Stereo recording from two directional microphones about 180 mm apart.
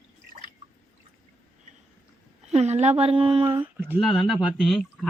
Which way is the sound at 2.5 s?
35° right (ahead or behind).